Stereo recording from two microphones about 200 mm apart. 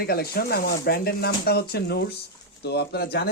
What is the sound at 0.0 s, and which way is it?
Speech, 50° left (ahead or behind).